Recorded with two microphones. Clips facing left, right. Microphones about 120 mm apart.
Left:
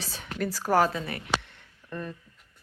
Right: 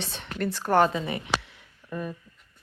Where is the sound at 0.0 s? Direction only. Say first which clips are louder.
Right 2 dB; centre (ahead or behind).